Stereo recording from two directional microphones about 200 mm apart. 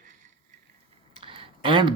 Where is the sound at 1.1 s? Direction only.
25° right (ahead or behind).